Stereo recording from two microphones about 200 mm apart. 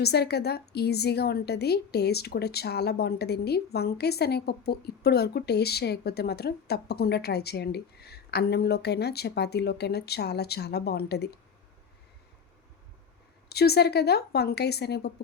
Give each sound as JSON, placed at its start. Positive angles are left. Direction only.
{"t": 0.0, "sound": "a woman's voice", "side_deg": 55}
{"t": 13.5, "sound": "a woman's voice", "side_deg": 55}